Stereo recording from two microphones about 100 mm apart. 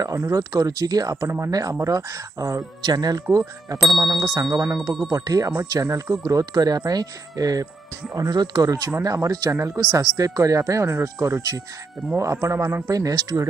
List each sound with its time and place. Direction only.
0.0 s speech: 35° right (ahead or behind)